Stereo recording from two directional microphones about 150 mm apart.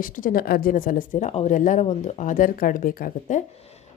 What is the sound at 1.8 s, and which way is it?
Speech, 45° left (ahead or behind).